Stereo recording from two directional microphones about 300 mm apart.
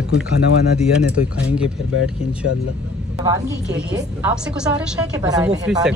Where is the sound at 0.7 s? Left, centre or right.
Centre.